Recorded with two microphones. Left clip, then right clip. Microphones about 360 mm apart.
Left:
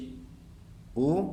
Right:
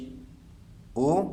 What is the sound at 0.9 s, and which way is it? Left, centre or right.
Speech, centre.